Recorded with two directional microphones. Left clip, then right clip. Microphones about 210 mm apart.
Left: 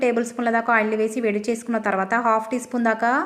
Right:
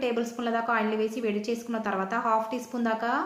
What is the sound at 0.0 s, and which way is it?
A woman's voice, 40° left (ahead or behind).